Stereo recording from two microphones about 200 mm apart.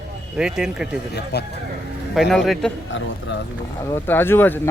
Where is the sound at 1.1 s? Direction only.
55° left (ahead or behind).